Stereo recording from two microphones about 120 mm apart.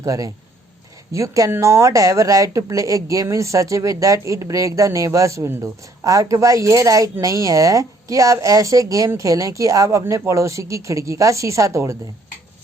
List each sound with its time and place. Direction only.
0.0 s speech: 30° right (ahead or behind)